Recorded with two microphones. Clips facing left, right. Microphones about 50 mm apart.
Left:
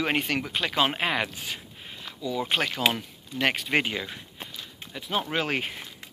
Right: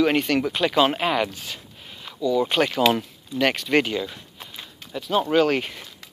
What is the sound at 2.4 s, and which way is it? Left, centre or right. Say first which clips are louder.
Speech: right 6 dB; centre.